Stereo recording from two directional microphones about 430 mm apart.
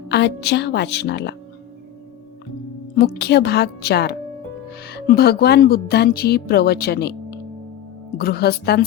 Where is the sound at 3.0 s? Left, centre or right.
Left.